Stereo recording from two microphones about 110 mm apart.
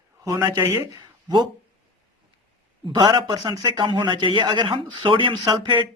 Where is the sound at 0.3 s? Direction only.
35° right (ahead or behind).